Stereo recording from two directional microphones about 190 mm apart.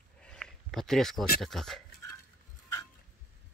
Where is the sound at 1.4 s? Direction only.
Centre (ahead or behind).